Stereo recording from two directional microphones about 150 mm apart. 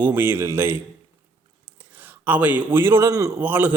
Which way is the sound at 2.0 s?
10° right (ahead or behind).